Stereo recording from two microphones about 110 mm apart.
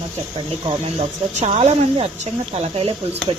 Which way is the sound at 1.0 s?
75° right (ahead or behind).